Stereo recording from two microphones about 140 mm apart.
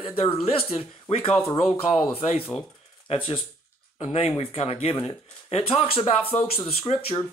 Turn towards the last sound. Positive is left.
turn(degrees=45)  # may be behind; listen again after turning